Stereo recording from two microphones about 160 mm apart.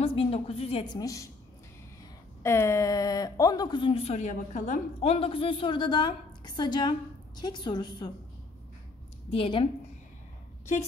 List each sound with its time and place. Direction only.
0.0 s a woman's voice: 35° left (ahead or behind)
0.9 s speech: 20° left (ahead or behind)
2.4 s speech: 15° left (ahead or behind)
9.3 s a woman's voice: 35° left (ahead or behind)